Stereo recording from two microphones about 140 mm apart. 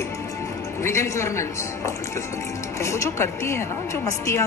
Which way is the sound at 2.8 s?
20° left (ahead or behind).